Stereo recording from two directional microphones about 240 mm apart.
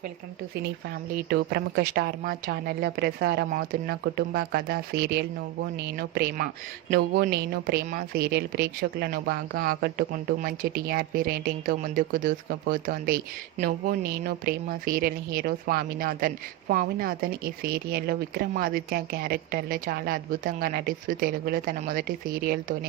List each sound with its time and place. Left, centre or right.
1.1 s speech: right